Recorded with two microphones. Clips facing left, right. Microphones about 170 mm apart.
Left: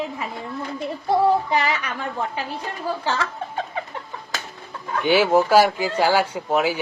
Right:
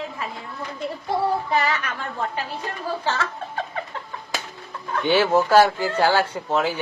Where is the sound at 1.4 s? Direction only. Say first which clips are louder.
Even; 15° left (ahead or behind).